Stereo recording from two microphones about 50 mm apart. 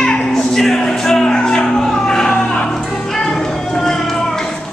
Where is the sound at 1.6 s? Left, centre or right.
Centre.